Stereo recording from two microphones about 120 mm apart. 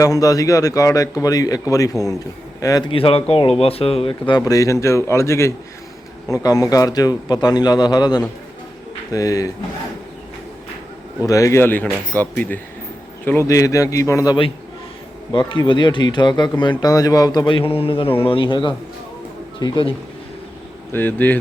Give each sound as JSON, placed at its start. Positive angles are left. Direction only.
{"t": 0.0, "sound": "a man's voice", "side_deg": 30}
{"t": 2.9, "sound": "speech", "side_deg": 50}
{"t": 4.4, "sound": "a man's voice", "side_deg": 30}
{"t": 11.3, "sound": "speech", "side_deg": 25}
{"t": 13.5, "sound": "a man's voice", "side_deg": 25}
{"t": 15.3, "sound": "speech", "side_deg": 40}
{"t": 20.9, "sound": "speech", "side_deg": 15}